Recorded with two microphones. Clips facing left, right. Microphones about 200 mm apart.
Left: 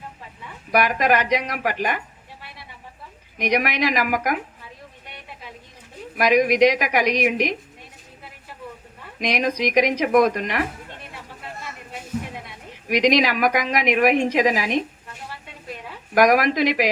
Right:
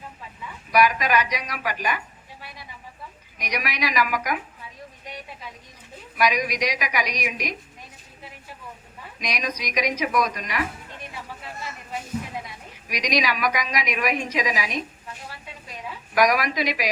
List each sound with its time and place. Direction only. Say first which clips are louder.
0.7 s a woman's voice: left 1 dB; 55° left (ahead or behind)
3.3 s a woman's voice: left 9 dB; 55° left (ahead or behind)
6.1 s a woman's voice: left 7 dB; 55° left (ahead or behind)
9.1 s a woman's voice: left 8 dB; 60° left (ahead or behind)
13.0 s a woman's voice: left 6 dB; 55° left (ahead or behind)
16.1 s a woman's voice: left 4 dB; 55° left (ahead or behind)